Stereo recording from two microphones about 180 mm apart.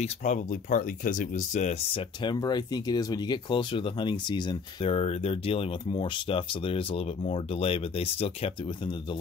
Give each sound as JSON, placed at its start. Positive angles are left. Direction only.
{"t": 0.0, "sound": "speech", "side_deg": 45}
{"t": 2.2, "sound": "speech", "side_deg": 20}